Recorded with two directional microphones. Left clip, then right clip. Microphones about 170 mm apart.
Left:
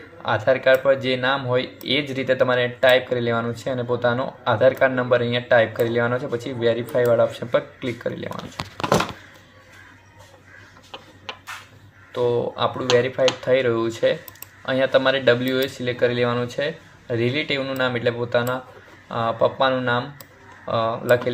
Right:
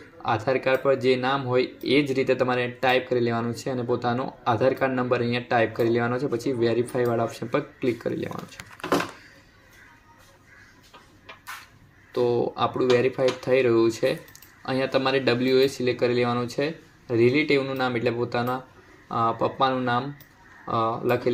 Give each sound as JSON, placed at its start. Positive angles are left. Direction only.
{"t": 0.3, "sound": "speech", "side_deg": -30}
{"t": 12.3, "sound": "speech", "side_deg": -35}